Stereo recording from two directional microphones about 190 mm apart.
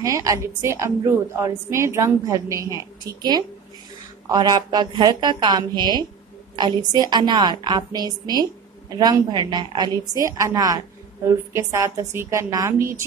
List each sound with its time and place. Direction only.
0.0 s a woman's voice: 15° right (ahead or behind)